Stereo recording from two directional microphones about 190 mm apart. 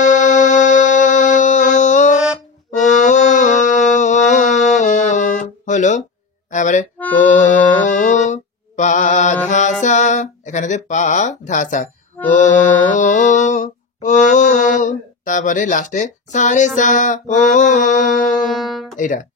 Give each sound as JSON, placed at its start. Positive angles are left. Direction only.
{"t": 0.0, "sound": "music", "side_deg": 40}
{"t": 18.5, "sound": "speech", "side_deg": 0}
{"t": 18.9, "sound": "music", "side_deg": 45}